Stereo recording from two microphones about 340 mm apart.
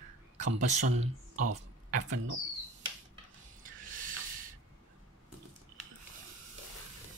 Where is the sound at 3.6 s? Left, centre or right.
Right.